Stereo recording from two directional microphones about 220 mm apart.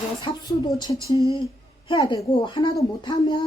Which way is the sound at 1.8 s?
20° left (ahead or behind).